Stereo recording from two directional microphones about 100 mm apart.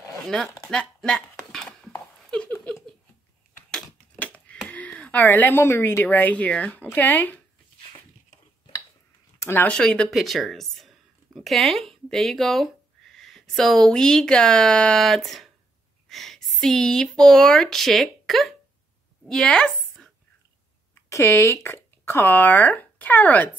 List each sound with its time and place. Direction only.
0.3 s speech: 5° left (ahead or behind)
0.7 s a sound: 10° left (ahead or behind)
3.7 s a sound: 10° left (ahead or behind)
9.4 s speech: 25° left (ahead or behind)
9.7 s a woman's voice: 10° left (ahead or behind)
21.1 s speech: 30° left (ahead or behind)